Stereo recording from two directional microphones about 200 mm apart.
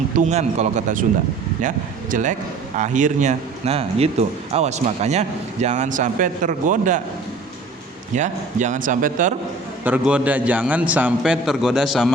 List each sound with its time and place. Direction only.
0.2 s a man's voice: 35° right (ahead or behind)
8.1 s a man's voice: 35° right (ahead or behind)
9.8 s a man's voice: 5° right (ahead or behind)